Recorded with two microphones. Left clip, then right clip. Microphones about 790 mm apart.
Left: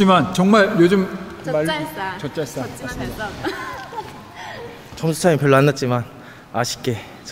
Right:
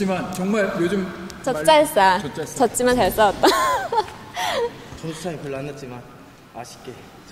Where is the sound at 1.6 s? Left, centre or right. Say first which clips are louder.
Right 10 dB; right.